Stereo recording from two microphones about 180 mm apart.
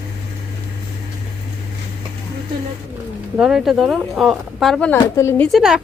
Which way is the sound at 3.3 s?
5° right (ahead or behind).